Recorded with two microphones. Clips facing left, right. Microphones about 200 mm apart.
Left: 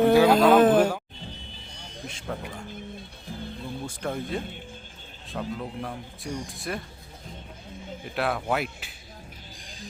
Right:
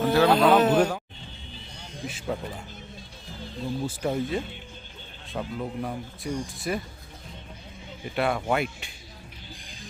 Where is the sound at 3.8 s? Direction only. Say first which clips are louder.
Right 4 dB; 5° right (ahead or behind).